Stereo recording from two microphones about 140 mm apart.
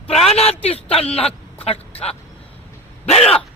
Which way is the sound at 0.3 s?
45° left (ahead or behind).